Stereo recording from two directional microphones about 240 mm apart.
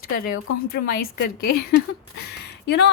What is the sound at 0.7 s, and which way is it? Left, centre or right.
A woman's voice, left.